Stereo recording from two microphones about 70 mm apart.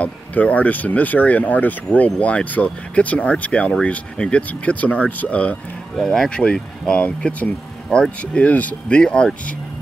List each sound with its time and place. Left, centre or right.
0.0 s speech: left
5.9 s speech: centre